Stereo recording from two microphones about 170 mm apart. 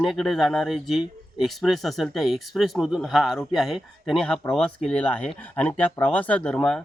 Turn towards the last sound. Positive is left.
turn(degrees=5)  # may be behind; listen again after turning